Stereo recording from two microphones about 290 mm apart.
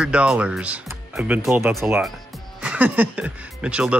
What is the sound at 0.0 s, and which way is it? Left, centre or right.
A man's voice, centre.